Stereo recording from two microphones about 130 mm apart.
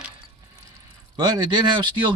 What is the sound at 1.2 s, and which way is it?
Speech, 35° right (ahead or behind).